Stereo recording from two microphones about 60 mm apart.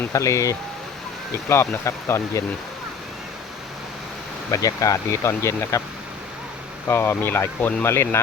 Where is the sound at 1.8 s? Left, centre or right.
Left.